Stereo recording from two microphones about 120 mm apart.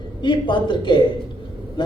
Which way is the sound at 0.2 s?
40° left (ahead or behind).